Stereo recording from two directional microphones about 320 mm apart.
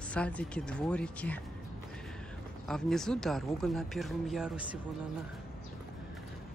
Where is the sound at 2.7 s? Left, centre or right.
Centre.